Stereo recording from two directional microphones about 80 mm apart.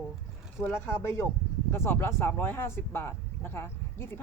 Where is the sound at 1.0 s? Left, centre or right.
Left.